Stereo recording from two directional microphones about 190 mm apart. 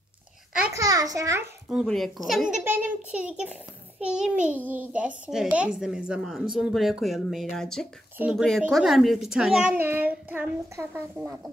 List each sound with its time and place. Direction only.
0.7 s a child's voice: 20° right (ahead or behind)
1.7 s a woman's voice: centre (ahead or behind)